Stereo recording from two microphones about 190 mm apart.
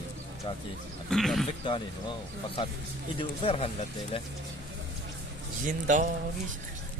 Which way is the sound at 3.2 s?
30° left (ahead or behind).